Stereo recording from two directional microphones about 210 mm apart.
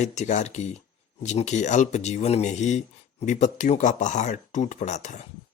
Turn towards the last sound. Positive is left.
turn(degrees=35)  # may be behind; listen again after turning